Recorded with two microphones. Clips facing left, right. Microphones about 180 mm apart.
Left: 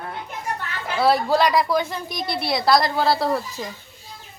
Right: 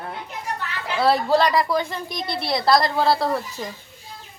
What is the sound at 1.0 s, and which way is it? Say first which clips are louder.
A woman's voice: even; 5° left (ahead or behind).